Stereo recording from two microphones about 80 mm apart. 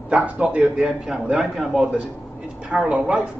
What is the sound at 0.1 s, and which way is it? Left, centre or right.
A man's voice, centre.